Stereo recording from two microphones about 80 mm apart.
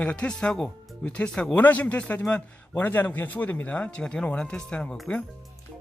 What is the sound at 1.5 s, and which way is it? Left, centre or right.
A man's voice, left.